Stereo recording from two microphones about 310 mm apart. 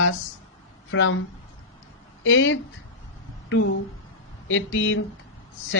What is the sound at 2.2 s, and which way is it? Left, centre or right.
Speech, left.